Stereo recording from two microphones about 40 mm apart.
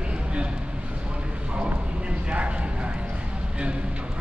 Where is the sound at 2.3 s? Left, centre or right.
Right.